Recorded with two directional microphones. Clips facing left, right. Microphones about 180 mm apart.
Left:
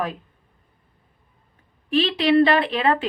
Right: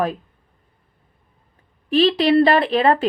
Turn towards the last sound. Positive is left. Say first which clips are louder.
# right 4 dB
turn(degrees=-40)  # may be behind; listen again after turning